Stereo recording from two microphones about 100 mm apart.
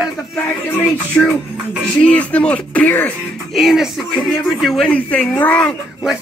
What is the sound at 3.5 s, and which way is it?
A man's voice, 5° right (ahead or behind).